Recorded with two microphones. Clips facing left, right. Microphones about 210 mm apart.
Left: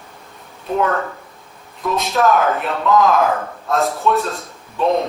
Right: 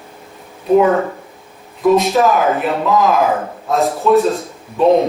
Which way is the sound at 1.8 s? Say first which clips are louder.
Right 6 dB; centre (ahead or behind).